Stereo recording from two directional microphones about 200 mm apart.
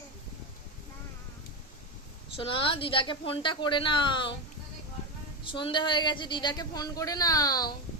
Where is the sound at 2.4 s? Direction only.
25° left (ahead or behind).